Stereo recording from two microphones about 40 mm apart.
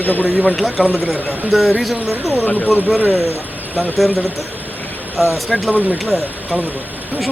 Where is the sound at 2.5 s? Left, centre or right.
Left.